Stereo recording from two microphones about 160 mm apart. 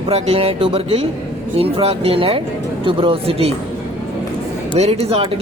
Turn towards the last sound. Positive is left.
turn(degrees=-40)  # may be behind; listen again after turning